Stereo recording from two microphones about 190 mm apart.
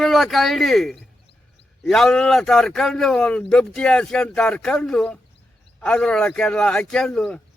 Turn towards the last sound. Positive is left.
turn(degrees=0)  # may be behind; listen again after turning